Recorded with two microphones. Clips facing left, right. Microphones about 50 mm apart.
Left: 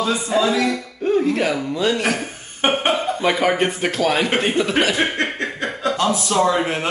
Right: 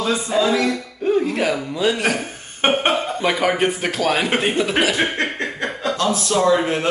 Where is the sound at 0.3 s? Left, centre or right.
Centre.